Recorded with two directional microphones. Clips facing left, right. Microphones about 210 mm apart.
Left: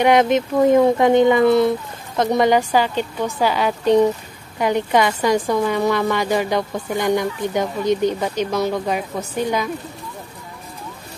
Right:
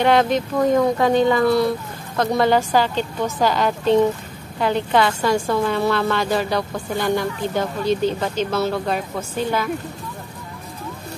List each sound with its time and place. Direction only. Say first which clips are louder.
0.0 s a woman's voice: left 2 dB; 20° left (ahead or behind)